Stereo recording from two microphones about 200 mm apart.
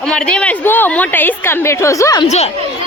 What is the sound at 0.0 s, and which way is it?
A woman's voice, 5° left (ahead or behind).